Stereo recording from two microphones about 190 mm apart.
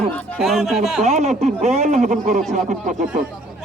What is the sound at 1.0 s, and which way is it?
Speech, 35° right (ahead or behind).